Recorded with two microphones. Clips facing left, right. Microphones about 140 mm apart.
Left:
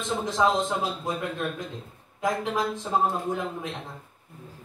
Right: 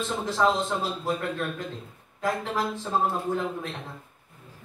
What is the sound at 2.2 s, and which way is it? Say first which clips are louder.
Speech: left 1 dB; 15° left (ahead or behind).